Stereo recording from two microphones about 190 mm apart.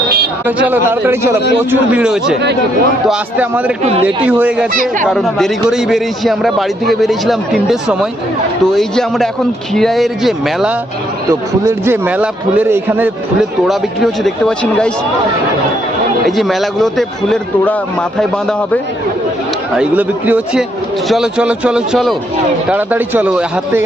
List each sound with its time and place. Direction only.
0.4 s a man's voice: 10° right (ahead or behind)
4.7 s speech: 45° right (ahead or behind)
5.0 s a man's voice: centre (ahead or behind)
11.3 s a man's voice: 15° right (ahead or behind)
13.7 s a man's voice: centre (ahead or behind)
16.2 s a man's voice: centre (ahead or behind)
19.7 s a man's voice: 5° right (ahead or behind)